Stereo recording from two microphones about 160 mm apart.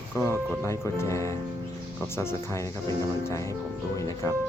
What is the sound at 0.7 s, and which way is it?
Speech, 15° left (ahead or behind).